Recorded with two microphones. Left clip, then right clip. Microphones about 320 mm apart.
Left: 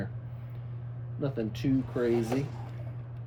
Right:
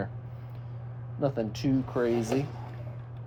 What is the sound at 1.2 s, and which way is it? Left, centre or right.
Speech, centre.